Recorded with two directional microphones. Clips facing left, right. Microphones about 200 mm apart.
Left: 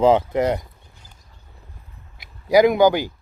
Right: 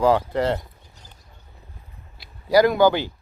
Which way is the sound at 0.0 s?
20° left (ahead or behind).